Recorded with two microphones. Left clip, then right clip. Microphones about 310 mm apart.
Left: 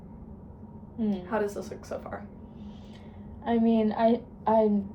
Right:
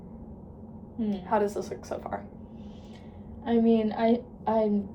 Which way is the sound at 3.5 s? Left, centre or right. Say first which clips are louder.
Right 1 dB; centre.